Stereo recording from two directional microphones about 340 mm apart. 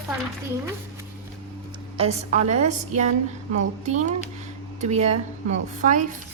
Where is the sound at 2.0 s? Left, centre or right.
Centre.